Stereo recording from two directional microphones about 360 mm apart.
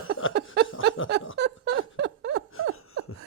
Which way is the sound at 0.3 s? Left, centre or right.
Right.